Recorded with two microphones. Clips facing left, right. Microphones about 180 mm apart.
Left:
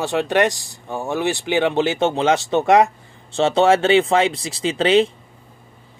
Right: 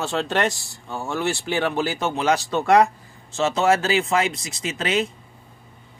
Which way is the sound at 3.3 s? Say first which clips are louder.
Left 4 dB; 30° left (ahead or behind).